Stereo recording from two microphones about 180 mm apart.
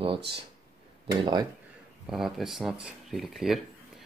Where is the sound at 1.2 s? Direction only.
25° right (ahead or behind).